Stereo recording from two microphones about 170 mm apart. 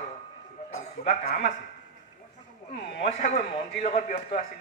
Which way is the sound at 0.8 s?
40° left (ahead or behind).